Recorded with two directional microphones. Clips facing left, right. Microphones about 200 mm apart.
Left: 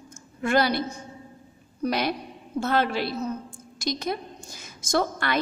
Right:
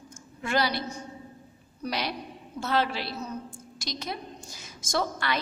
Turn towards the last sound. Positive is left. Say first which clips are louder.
# left 4 dB
turn(degrees=50)  # may be behind; listen again after turning